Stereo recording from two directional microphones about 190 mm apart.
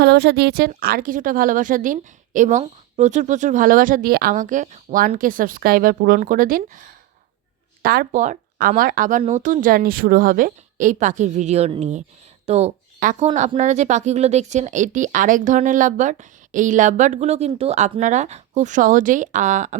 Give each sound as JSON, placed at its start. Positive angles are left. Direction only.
{"t": 0.0, "sound": "a woman's voice", "side_deg": -60}